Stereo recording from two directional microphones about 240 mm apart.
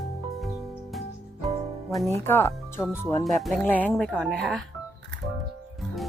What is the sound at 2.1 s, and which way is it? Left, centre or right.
Speech, centre.